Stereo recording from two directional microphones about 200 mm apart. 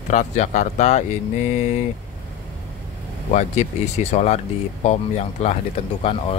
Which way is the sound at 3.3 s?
35° left (ahead or behind).